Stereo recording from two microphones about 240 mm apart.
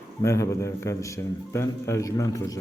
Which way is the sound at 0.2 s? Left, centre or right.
Centre.